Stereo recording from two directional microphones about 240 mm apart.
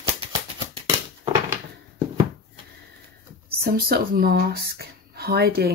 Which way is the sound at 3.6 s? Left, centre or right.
Right.